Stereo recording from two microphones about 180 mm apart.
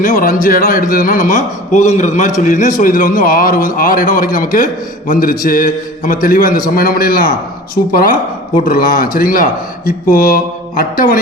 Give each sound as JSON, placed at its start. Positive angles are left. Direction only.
{"t": 0.0, "sound": "a man's voice", "side_deg": 50}
{"t": 8.6, "sound": "a man's voice", "side_deg": 50}